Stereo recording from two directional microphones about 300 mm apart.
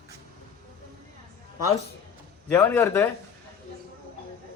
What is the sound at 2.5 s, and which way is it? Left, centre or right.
Speech, centre.